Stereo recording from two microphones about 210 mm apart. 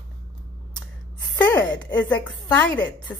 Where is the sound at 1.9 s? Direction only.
10° left (ahead or behind).